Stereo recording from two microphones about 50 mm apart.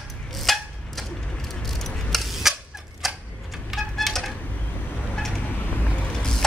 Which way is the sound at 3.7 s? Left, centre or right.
Centre.